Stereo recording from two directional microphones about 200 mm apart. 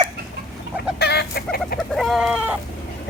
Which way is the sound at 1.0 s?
55° left (ahead or behind).